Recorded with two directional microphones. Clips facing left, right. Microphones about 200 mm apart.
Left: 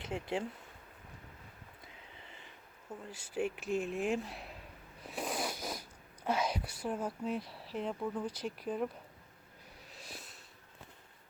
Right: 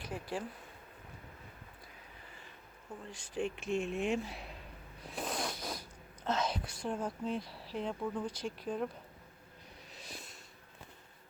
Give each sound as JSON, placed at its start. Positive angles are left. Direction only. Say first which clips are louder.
{"t": 0.0, "sound": "speech", "louder": "left 3 dB", "side_deg": 25}
{"t": 3.0, "sound": "speech", "louder": "left 1 dB", "side_deg": 5}
{"t": 5.0, "sound": "snort", "louder": "left 1 dB", "side_deg": 5}
{"t": 6.2, "sound": "speech", "louder": "left 1 dB", "side_deg": 10}
{"t": 10.0, "sound": "snort", "louder": "right 1 dB", "side_deg": 0}